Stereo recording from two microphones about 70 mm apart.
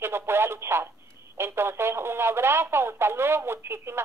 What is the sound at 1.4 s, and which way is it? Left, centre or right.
Radio, right.